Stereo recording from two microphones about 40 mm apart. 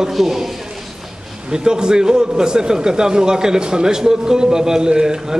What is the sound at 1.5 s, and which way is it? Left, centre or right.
A man's voice, centre.